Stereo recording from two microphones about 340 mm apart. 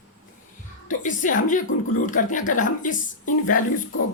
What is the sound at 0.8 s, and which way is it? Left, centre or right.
Speech, left.